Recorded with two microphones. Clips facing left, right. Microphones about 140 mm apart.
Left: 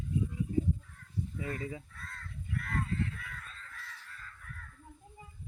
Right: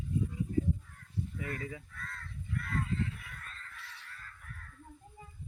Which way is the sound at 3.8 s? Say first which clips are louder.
Left 1 dB; 70° right (ahead or behind).